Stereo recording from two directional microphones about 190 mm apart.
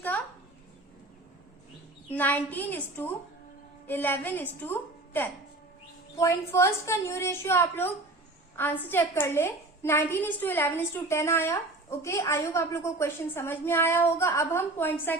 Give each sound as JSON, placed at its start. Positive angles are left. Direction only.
{"t": 2.1, "sound": "a woman's voice", "side_deg": 10}